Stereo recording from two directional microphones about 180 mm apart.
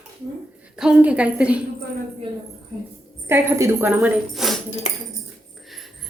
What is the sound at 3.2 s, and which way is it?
Speech, 15° right (ahead or behind).